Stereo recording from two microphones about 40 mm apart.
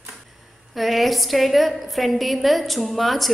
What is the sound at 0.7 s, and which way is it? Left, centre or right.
A woman's voice, centre.